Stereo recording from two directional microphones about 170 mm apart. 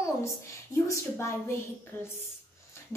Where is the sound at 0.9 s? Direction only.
15° left (ahead or behind).